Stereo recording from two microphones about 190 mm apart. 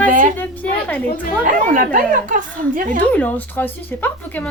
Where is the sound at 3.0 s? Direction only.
10° left (ahead or behind).